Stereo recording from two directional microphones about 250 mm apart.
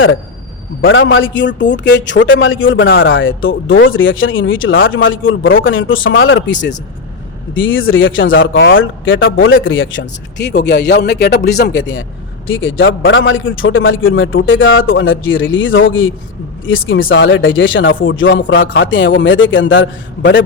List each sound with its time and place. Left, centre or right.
0.8 s speech: left